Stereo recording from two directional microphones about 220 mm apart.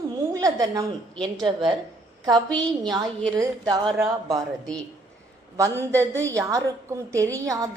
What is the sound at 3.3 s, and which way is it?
A woman's voice, 15° right (ahead or behind).